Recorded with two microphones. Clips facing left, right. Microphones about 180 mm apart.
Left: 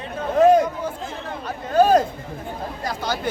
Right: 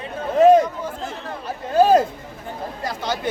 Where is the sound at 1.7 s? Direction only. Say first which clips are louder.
Right 1 dB; 5° right (ahead or behind).